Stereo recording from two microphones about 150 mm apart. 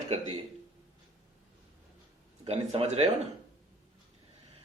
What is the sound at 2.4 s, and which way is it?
Speech, 40° right (ahead or behind).